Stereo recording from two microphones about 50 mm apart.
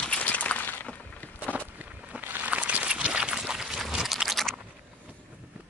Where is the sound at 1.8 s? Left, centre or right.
Right; by 4.6 s centre.